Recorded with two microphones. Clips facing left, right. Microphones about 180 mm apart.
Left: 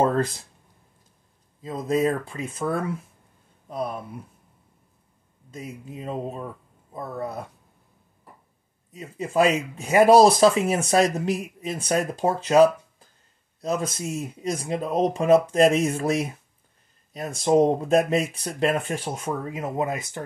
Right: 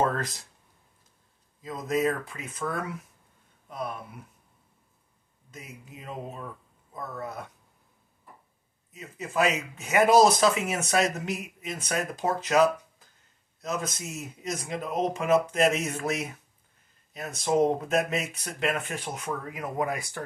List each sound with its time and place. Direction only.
0.0 s speech: 30° left (ahead or behind)
1.6 s speech: 30° left (ahead or behind)
5.5 s speech: 30° left (ahead or behind)
8.9 s speech: 30° left (ahead or behind)